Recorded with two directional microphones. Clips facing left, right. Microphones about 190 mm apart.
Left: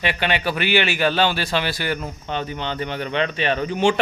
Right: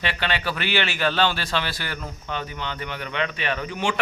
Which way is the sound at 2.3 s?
25° left (ahead or behind).